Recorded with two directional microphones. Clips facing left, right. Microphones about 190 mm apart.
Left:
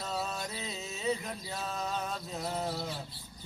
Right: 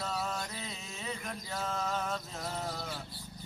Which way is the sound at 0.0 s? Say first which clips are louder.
Even; 20° left (ahead or behind).